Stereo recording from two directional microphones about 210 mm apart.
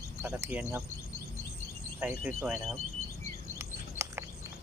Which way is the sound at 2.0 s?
5° right (ahead or behind).